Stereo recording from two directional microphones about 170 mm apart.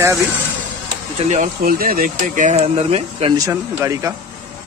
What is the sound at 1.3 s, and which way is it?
Speech, 55° right (ahead or behind).